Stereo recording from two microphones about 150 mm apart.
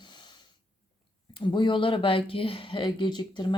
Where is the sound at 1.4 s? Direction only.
30° left (ahead or behind).